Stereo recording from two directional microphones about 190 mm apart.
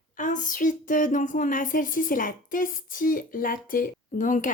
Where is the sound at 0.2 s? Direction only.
40° left (ahead or behind).